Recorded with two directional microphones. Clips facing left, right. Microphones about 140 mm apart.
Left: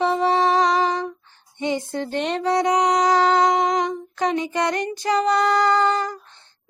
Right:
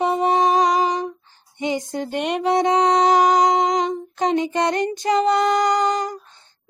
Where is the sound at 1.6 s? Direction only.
15° right (ahead or behind).